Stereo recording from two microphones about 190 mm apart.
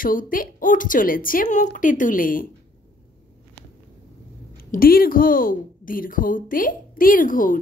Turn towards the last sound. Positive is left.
turn(degrees=45)  # may be behind; listen again after turning